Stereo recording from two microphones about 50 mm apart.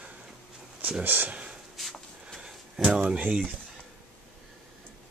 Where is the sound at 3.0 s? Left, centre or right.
Centre.